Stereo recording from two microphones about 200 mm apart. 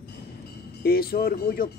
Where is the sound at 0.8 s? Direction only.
50° left (ahead or behind).